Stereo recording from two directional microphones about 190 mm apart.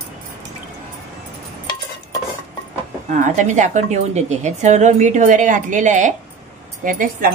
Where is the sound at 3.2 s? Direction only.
40° right (ahead or behind).